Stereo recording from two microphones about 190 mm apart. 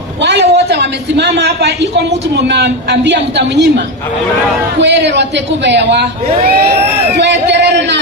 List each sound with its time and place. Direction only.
0.2 s a man's voice: 65° right (ahead or behind)
4.8 s a man's voice: 65° right (ahead or behind)
7.2 s a sound: 65° right (ahead or behind)